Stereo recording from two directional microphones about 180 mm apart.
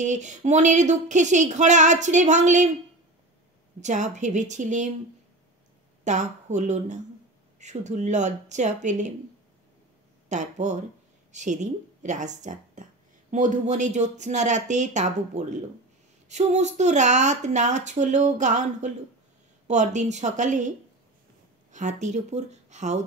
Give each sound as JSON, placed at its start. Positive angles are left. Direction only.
{"t": 0.0, "sound": "a woman's voice", "side_deg": -40}
{"t": 3.8, "sound": "a woman's voice", "side_deg": -40}
{"t": 6.0, "sound": "a woman's voice", "side_deg": -40}
{"t": 10.3, "sound": "a woman's voice", "side_deg": -40}
{"t": 21.7, "sound": "a woman's voice", "side_deg": -40}